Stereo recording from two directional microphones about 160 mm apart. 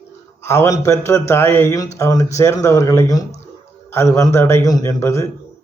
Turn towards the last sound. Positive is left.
turn(degrees=20)  # may be behind; listen again after turning